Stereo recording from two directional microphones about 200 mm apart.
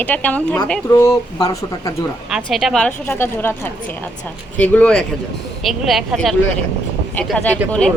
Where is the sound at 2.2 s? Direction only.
Centre (ahead or behind).